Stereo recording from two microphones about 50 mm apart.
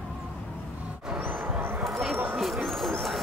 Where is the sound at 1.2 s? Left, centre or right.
Right.